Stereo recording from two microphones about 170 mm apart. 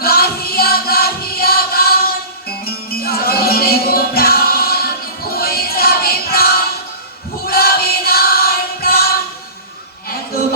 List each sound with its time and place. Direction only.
0.0 s music: 65° left (ahead or behind)
7.4 s choir: 60° left (ahead or behind)